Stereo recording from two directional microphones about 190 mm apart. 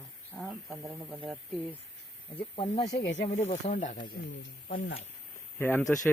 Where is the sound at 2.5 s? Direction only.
25° left (ahead or behind).